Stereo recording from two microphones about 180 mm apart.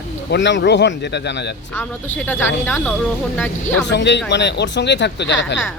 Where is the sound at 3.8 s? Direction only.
75° left (ahead or behind).